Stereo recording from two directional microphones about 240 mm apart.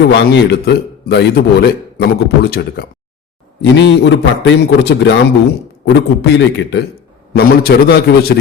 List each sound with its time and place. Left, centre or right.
0.0 s a man's voice: left